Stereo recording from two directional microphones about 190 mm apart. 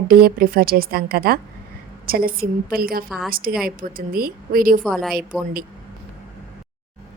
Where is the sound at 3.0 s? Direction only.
Centre (ahead or behind).